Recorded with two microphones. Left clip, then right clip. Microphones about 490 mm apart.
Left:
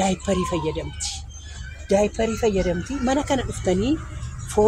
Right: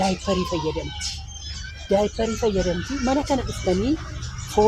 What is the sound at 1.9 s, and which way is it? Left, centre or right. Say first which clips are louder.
Speech: left 1 dB; right.